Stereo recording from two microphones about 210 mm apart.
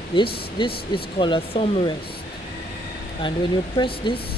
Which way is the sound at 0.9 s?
25° left (ahead or behind).